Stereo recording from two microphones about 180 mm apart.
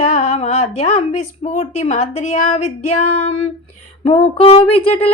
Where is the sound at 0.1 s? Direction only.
35° left (ahead or behind).